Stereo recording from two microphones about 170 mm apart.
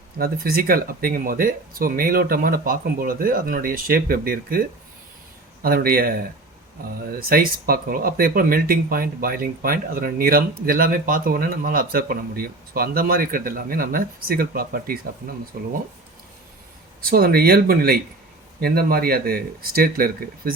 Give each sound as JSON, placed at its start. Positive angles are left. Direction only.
{"t": 0.2, "sound": "speech", "side_deg": -60}
{"t": 5.6, "sound": "speech", "side_deg": -60}
{"t": 17.0, "sound": "speech", "side_deg": -60}